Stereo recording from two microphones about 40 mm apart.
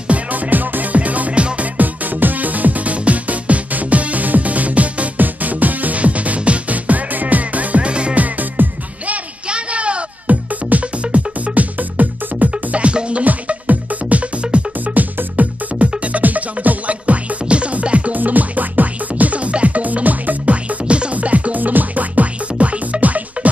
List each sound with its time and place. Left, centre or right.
0.1 s music: right
1.8 s music: right
8.2 s music: right
9.5 s music: right
18.1 s music: right
20.8 s music: right